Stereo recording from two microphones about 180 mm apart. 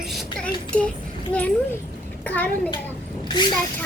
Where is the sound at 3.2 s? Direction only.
25° left (ahead or behind).